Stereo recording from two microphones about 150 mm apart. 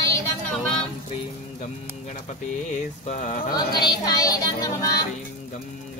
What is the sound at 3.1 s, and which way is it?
Speech, 55° left (ahead or behind).